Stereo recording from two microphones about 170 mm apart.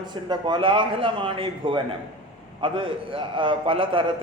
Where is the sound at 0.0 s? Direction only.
25° right (ahead or behind).